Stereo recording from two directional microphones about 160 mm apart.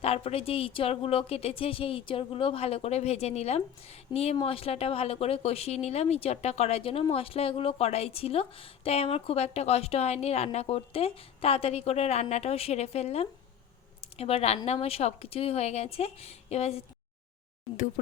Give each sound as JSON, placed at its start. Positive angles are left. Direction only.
{"t": 0.0, "sound": "speech", "side_deg": 40}